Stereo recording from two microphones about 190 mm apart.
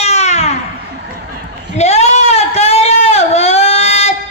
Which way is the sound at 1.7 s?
35° left (ahead or behind).